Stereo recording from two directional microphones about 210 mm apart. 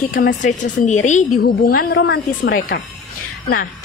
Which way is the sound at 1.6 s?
45° left (ahead or behind).